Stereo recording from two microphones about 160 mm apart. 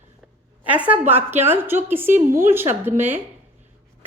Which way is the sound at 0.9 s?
10° right (ahead or behind).